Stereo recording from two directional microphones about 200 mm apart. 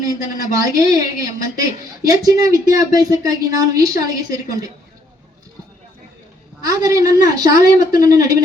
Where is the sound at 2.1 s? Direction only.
15° right (ahead or behind).